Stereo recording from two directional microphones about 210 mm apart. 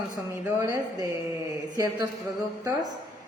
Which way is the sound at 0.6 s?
20° right (ahead or behind).